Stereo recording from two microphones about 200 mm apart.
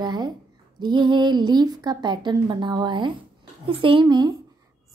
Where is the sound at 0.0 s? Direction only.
20° right (ahead or behind).